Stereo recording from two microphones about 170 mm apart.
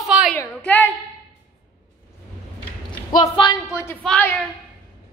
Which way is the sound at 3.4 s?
20° left (ahead or behind).